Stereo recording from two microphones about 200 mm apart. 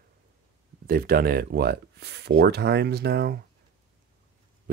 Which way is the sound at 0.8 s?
45° right (ahead or behind).